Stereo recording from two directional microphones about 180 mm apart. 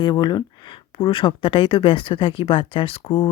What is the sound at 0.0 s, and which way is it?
Speech, 25° left (ahead or behind).